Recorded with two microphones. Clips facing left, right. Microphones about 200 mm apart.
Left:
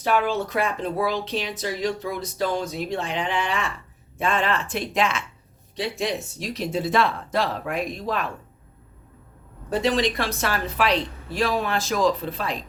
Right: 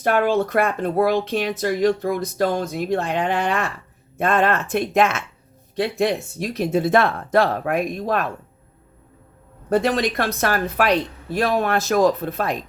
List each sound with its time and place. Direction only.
0.0 s speech: 55° right (ahead or behind)
9.6 s speech: 55° right (ahead or behind)